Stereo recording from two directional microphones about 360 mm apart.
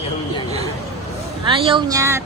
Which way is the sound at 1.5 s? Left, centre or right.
Centre.